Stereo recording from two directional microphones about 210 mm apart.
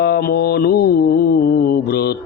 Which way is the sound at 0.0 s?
50° left (ahead or behind).